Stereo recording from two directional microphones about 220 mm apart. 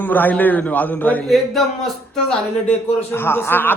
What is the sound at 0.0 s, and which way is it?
A man's voice, 10° left (ahead or behind).